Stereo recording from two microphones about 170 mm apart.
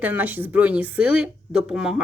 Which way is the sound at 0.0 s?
10° right (ahead or behind).